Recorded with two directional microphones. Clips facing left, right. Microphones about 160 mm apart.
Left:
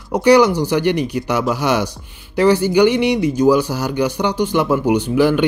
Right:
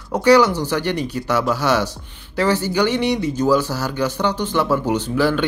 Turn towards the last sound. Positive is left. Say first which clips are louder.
# left 4 dB
turn(degrees=15)  # may be behind; listen again after turning